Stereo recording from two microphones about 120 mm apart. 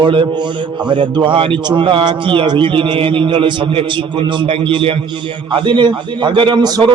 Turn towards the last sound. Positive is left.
turn(degrees=-35)  # may be behind; listen again after turning